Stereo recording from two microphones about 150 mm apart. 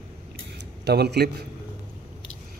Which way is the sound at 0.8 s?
90° right.